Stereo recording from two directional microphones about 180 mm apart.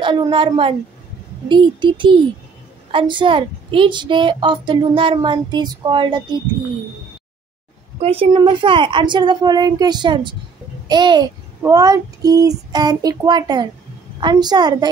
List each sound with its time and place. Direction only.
0.0 s a woman's voice: 25° right (ahead or behind)
8.0 s a woman's voice: 30° right (ahead or behind)